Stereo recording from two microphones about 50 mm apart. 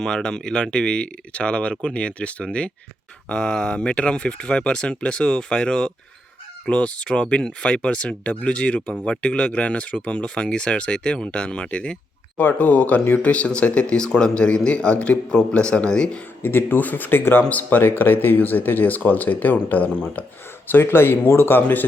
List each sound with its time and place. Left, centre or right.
0.0 s speech: centre
12.4 s speech: left
16.4 s speech: left
17.5 s speech: left
20.7 s speech: left